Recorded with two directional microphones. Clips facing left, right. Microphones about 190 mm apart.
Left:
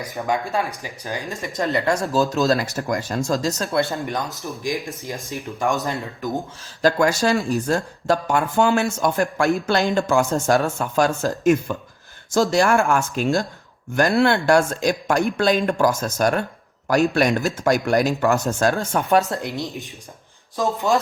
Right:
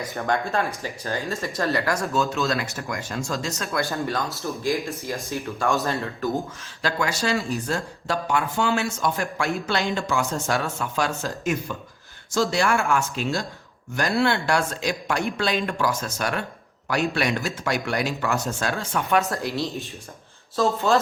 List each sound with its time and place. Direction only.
0.2 s speech: 10° left (ahead or behind)
2.1 s speech: 35° left (ahead or behind)
3.9 s speech: 20° left (ahead or behind)
6.8 s speech: 45° left (ahead or behind)
19.3 s speech: 20° left (ahead or behind)